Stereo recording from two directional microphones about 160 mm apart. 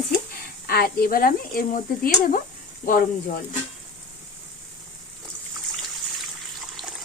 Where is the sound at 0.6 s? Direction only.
75° left (ahead or behind).